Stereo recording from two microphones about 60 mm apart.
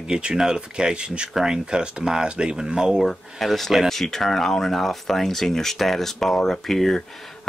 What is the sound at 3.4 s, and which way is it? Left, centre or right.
Speech, centre.